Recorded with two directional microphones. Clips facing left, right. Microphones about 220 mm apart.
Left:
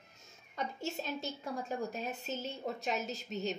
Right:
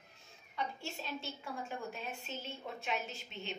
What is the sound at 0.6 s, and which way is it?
A woman's voice, 40° left (ahead or behind).